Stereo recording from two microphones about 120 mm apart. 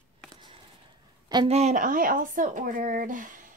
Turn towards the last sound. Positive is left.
turn(degrees=-90)